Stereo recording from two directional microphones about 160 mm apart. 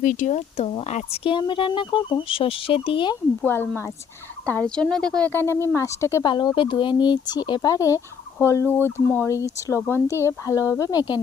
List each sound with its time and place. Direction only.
0.0 s speech: 55° left (ahead or behind); by 3.2 s 30° left (ahead or behind)
3.4 s speech: 10° left (ahead or behind)
6.3 s speech: 30° left (ahead or behind)